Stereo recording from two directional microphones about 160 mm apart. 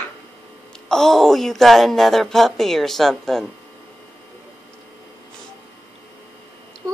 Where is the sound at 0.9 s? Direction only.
Centre (ahead or behind).